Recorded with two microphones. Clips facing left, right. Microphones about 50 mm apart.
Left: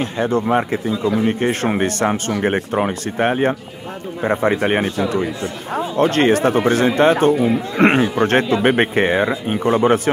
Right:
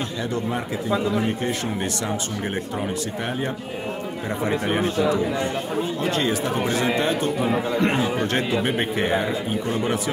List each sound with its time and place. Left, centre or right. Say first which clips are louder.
0.2 s speech: left 11 dB; left
5.9 s speech: left 12 dB; left
7.7 s a man's voice: left 11 dB; left
8.0 s speech: left 7 dB; left